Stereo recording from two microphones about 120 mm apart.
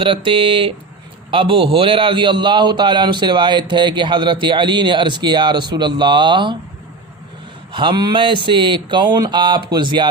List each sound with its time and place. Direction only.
0.0 s a man's voice: 45° right (ahead or behind)
7.7 s a man's voice: 45° right (ahead or behind)